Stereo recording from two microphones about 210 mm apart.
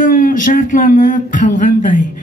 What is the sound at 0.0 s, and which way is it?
Speech, 40° left (ahead or behind).